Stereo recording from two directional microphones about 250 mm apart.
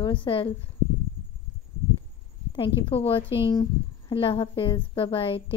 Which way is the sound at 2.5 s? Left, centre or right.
Left.